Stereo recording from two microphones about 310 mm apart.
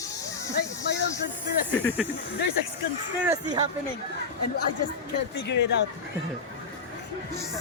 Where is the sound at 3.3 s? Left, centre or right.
Centre.